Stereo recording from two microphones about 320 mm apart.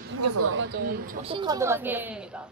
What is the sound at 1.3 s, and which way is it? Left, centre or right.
Speech, centre.